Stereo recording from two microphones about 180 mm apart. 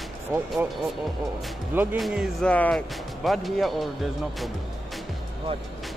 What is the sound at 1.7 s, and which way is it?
Speech, 10° right (ahead or behind).